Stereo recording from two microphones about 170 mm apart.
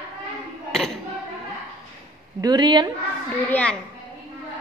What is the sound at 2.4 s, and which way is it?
Speech, 25° right (ahead or behind).